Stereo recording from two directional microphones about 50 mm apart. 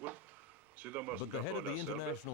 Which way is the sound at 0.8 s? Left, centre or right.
Right.